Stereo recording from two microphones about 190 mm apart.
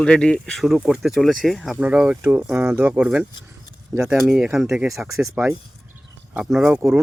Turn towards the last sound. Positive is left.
turn(degrees=0)  # may be behind; listen again after turning